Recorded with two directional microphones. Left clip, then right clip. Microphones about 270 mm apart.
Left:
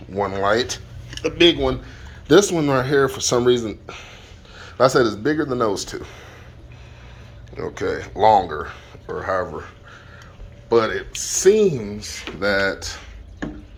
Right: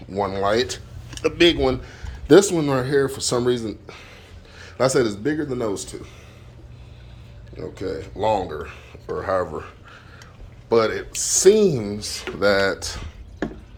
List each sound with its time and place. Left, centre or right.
0.1 s speech: centre
3.5 s speech: right
4.1 s speech: centre
7.5 s speech: centre